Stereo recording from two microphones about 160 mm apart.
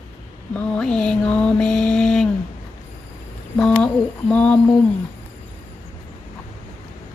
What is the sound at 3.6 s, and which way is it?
A woman's voice, 5° left (ahead or behind).